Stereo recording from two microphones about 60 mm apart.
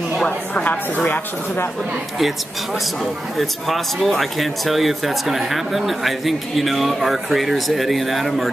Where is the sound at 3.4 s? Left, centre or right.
Centre.